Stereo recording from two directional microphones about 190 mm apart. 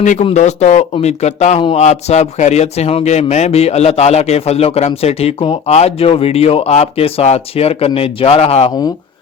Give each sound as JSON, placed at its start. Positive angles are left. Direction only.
{"t": 0.0, "sound": "speech", "side_deg": 40}